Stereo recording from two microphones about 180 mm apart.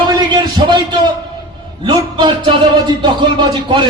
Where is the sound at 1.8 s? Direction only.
25° right (ahead or behind).